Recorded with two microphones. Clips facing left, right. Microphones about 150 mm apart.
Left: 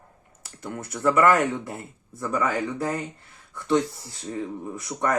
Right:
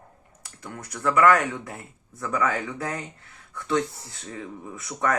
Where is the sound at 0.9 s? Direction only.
5° left (ahead or behind).